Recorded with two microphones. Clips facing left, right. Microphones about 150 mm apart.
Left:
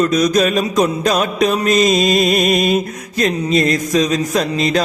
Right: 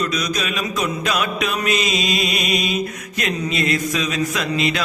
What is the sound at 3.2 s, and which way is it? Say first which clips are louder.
Music: left 7 dB; 40° left (ahead or behind).